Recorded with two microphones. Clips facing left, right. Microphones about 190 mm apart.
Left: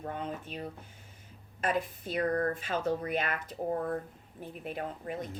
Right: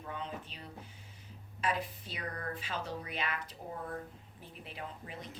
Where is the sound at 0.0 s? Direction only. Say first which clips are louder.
Left 5 dB; 50° left (ahead or behind).